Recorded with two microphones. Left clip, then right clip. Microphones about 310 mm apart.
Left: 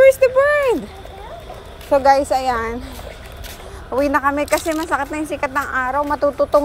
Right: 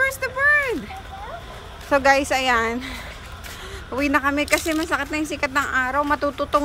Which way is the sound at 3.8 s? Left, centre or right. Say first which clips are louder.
Left 4 dB; centre.